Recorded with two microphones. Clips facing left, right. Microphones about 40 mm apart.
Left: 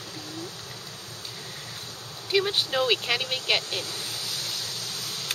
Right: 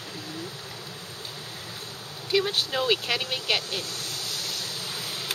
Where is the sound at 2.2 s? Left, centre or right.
Centre.